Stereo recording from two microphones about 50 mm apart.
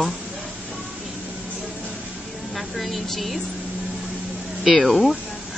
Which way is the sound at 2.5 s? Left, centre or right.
Centre.